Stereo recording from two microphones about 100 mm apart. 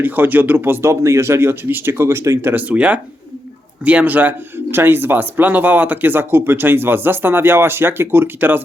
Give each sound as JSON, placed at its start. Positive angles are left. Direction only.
{"t": 0.0, "sound": "speech", "side_deg": -20}